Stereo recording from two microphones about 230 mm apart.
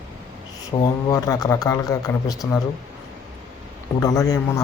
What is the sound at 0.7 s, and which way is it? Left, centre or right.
A man's voice, centre.